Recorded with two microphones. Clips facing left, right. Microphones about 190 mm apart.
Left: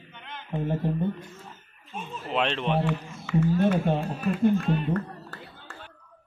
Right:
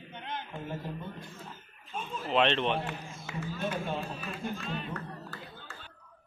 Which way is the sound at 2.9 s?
60° left (ahead or behind).